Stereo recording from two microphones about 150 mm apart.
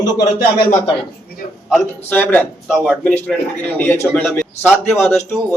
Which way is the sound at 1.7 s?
10° left (ahead or behind).